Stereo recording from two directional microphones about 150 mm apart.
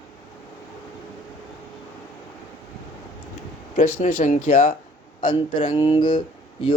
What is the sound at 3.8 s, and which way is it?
Speech, 70° left (ahead or behind).